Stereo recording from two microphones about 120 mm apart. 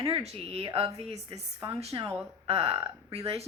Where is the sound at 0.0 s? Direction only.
55° right (ahead or behind).